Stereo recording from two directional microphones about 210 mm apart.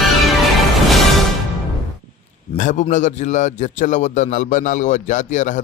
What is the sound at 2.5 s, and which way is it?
A man's voice, 35° left (ahead or behind).